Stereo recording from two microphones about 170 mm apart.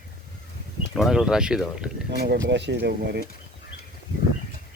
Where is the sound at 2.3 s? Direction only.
90° right; by 3.2 s 75° right (ahead or behind).